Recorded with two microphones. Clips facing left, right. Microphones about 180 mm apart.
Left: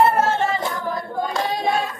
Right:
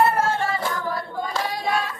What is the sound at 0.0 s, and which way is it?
Singing, 25° left (ahead or behind).